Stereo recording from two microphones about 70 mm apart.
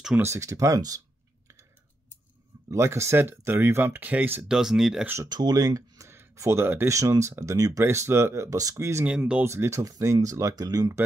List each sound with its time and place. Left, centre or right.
0.2 s speech: right
2.7 s speech: right
4.5 s speech: centre
5.3 s speech: right
6.0 s speech: right
6.9 s speech: right
7.8 s speech: right
8.5 s speech: right
9.0 s speech: centre
9.4 s speech: right
9.8 s speech: right